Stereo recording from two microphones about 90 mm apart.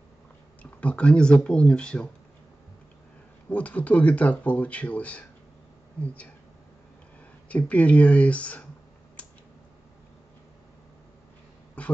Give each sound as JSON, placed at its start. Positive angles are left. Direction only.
{"t": 0.6, "sound": "speech", "side_deg": 15}
{"t": 3.4, "sound": "speech", "side_deg": 15}
{"t": 7.4, "sound": "speech", "side_deg": 15}
{"t": 9.2, "sound": "tick-tock", "side_deg": 15}
{"t": 11.8, "sound": "speech", "side_deg": 15}